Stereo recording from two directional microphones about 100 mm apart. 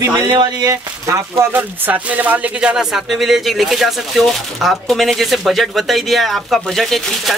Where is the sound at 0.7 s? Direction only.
30° right (ahead or behind).